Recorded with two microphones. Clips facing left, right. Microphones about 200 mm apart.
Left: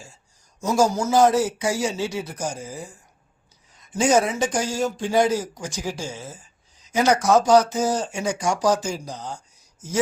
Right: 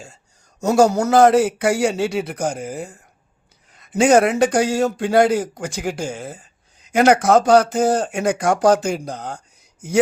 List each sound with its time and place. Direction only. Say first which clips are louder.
0.6 s speech: right 5 dB; 65° right (ahead or behind)